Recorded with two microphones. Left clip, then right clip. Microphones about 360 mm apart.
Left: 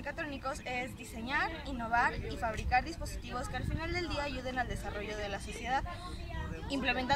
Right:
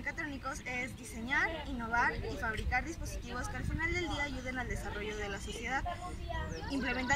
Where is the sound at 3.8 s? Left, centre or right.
Centre.